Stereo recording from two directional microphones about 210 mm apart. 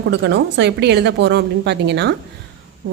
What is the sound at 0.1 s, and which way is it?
Speech, 55° right (ahead or behind).